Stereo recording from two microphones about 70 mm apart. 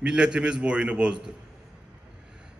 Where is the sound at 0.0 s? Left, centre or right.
Centre.